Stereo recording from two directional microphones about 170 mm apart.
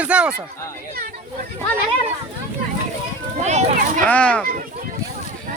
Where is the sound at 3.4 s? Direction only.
45° right (ahead or behind).